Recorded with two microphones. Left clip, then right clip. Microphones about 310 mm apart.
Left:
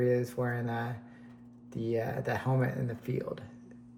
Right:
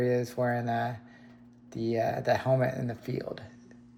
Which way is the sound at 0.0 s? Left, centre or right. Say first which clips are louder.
Right 2 dB; centre.